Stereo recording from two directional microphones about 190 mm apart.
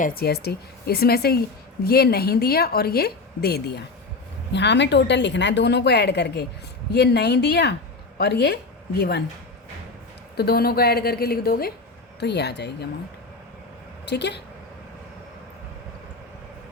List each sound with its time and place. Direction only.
0.0 s a woman's voice: 55° left (ahead or behind)
10.3 s a woman's voice: 55° left (ahead or behind)
14.0 s a woman's voice: 60° left (ahead or behind)